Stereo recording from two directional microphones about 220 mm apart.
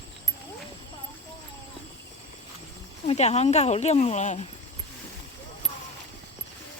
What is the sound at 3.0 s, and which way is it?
Speech, 30° left (ahead or behind).